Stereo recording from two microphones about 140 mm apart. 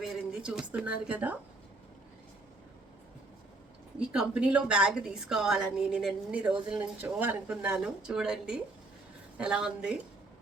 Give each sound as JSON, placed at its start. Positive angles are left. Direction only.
{"t": 0.0, "sound": "speech", "side_deg": -5}
{"t": 4.1, "sound": "a woman's voice", "side_deg": -5}